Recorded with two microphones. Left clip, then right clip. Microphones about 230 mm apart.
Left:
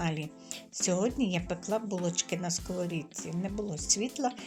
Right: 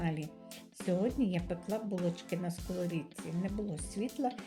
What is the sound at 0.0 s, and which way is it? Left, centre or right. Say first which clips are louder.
Speech: left 4 dB; centre.